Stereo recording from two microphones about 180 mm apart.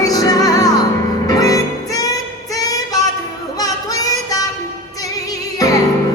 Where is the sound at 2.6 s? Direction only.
20° left (ahead or behind).